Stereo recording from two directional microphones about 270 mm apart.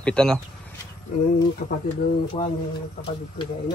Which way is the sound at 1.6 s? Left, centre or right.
Left.